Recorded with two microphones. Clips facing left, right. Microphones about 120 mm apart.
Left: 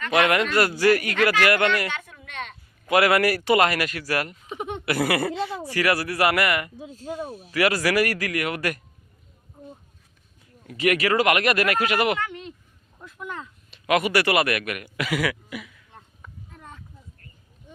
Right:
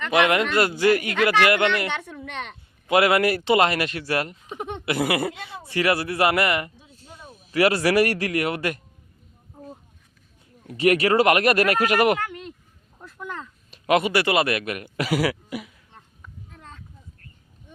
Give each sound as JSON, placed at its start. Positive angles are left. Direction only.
{"t": 0.1, "sound": "speech", "side_deg": -25}
{"t": 4.5, "sound": "laughter", "side_deg": 5}
{"t": 4.9, "sound": "speech", "side_deg": -20}
{"t": 7.0, "sound": "speech", "side_deg": 55}
{"t": 7.5, "sound": "speech", "side_deg": -30}
{"t": 10.7, "sound": "speech", "side_deg": -30}
{"t": 13.1, "sound": "speech", "side_deg": 5}
{"t": 13.7, "sound": "a man's voice", "side_deg": -35}
{"t": 14.9, "sound": "throat clearing", "side_deg": -35}
{"t": 16.5, "sound": "a sound", "side_deg": 15}